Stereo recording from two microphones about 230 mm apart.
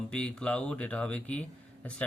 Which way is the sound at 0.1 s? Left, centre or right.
Centre.